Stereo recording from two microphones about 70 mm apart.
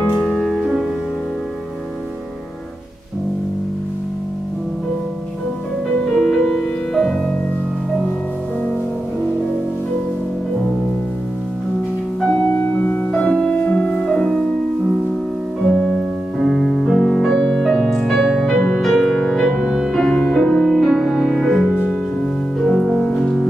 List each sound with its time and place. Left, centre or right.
0.1 s music: centre
6.1 s music: centre
12.4 s music: left; by 14.4 s centre
15.6 s music: centre
19.5 s music: centre
19.9 s music: centre